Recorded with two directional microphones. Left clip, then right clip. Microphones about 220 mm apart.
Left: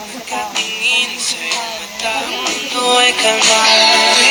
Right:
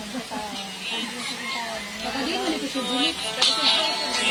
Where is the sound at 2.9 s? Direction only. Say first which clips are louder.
Left 12 dB; 40° left (ahead or behind).